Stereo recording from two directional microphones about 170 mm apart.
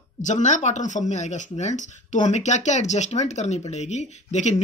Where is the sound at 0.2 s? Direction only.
45° left (ahead or behind).